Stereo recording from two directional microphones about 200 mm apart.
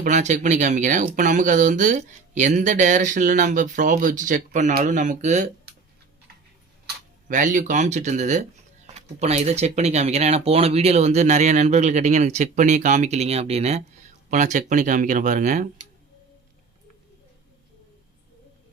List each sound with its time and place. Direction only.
0.0 s speech: 35° right (ahead or behind)
7.3 s speech: 40° right (ahead or behind)